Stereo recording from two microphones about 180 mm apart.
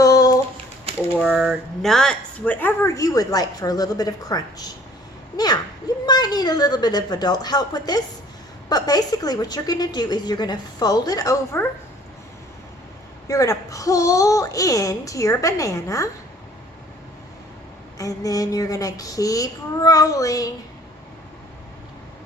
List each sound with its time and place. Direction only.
0.0 s a sound: 20° left (ahead or behind)
1.2 s a woman's voice: 5° right (ahead or behind); by 11.6 s 20° left (ahead or behind)
13.2 s speech: 20° left (ahead or behind)
17.9 s a woman's voice: 20° left (ahead or behind)